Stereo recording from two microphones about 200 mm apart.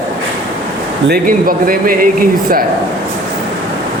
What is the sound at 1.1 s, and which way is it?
A man's voice, 45° right (ahead or behind).